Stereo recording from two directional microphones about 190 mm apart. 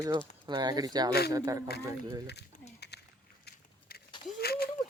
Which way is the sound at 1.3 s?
15° right (ahead or behind).